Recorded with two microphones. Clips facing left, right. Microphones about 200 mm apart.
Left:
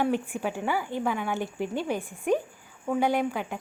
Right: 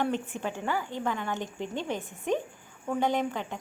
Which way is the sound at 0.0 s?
10° left (ahead or behind).